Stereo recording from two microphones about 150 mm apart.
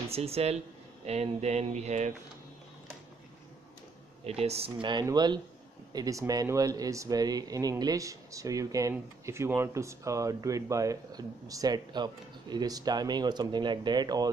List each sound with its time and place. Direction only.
0.1 s speech: 45° right (ahead or behind)
4.3 s speech: 40° right (ahead or behind)
5.0 s speech: 30° right (ahead or behind)